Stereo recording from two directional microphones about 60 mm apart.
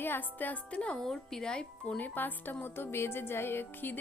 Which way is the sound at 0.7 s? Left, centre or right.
Centre.